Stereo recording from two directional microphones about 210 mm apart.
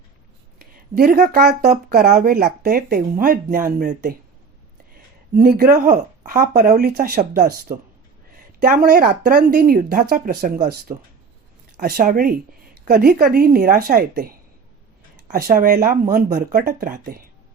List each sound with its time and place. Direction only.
0.6 s speech: 45° right (ahead or behind)
5.3 s speech: 45° right (ahead or behind)
15.3 s speech: 45° right (ahead or behind)